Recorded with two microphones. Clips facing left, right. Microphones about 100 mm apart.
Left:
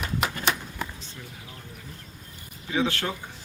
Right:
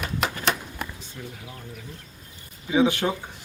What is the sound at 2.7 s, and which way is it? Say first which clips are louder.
Speech: right 6 dB; 15° right (ahead or behind).